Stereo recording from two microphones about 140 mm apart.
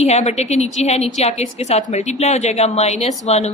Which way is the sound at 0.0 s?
50° left (ahead or behind).